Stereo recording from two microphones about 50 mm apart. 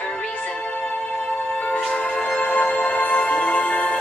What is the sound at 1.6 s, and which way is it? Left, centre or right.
Music, left.